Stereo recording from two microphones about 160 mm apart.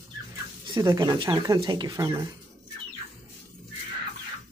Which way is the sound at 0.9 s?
25° right (ahead or behind).